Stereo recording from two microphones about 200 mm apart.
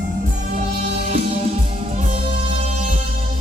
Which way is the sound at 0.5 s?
35° right (ahead or behind).